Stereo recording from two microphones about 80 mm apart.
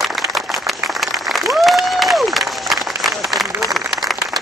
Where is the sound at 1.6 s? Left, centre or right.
Centre.